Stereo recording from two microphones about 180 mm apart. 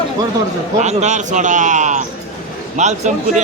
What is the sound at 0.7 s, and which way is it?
A man's voice, 40° right (ahead or behind).